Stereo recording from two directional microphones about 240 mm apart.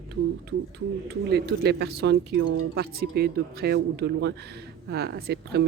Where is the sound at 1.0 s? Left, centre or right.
Right.